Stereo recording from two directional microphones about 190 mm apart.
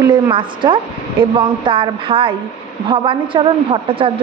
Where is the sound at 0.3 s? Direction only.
25° right (ahead or behind).